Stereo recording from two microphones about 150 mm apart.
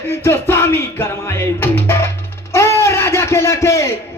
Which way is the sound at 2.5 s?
20° left (ahead or behind).